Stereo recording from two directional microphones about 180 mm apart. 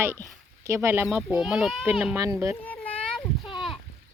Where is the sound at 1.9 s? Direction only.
15° right (ahead or behind).